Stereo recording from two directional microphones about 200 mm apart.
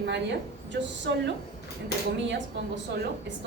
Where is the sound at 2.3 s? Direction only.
65° right (ahead or behind).